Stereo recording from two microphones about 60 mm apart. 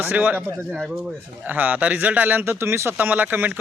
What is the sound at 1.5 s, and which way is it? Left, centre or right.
Speech, right.